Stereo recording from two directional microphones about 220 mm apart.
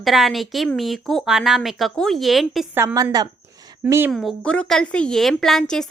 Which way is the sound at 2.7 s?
15° right (ahead or behind).